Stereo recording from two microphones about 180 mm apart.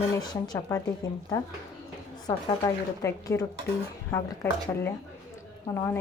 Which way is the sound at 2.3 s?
20° left (ahead or behind).